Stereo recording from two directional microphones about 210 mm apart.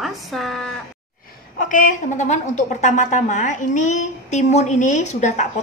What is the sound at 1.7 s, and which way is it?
A woman's voice, 40° left (ahead or behind).